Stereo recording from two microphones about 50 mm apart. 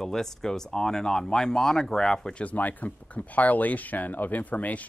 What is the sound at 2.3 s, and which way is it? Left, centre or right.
Speech, left.